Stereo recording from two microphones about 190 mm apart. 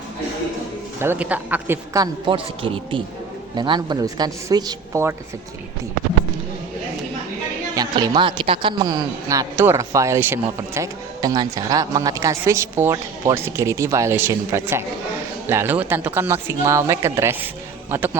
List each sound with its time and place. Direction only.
0.9 s a man's voice: 10° right (ahead or behind)
7.8 s a man's voice: 20° right (ahead or behind)